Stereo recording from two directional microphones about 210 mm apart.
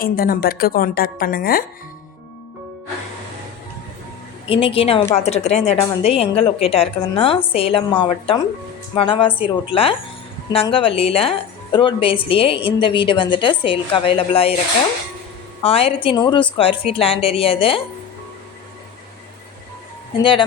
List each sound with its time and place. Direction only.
0.0 s a woman's voice: 45° left (ahead or behind)
4.4 s a woman's voice: 25° left (ahead or behind)
15.6 s a woman's voice: 25° left (ahead or behind)